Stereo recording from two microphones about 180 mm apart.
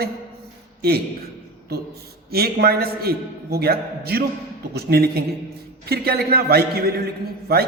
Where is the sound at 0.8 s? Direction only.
60° right (ahead or behind).